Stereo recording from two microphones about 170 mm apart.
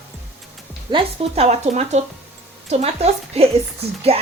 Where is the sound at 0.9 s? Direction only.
35° right (ahead or behind).